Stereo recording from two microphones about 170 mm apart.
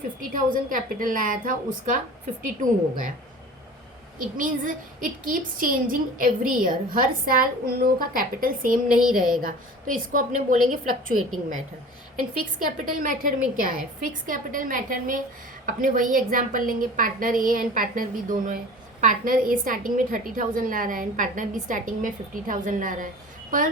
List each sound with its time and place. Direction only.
0.2 s a woman's voice: 50° right (ahead or behind)
4.2 s a woman's voice: 55° right (ahead or behind)